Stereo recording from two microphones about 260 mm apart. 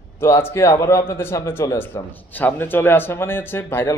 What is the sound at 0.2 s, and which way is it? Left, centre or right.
A man's voice, centre.